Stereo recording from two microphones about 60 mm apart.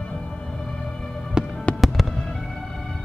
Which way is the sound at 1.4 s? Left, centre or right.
Centre.